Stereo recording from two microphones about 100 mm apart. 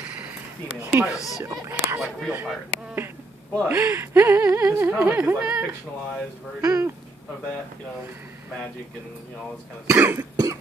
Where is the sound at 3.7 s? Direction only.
25° right (ahead or behind).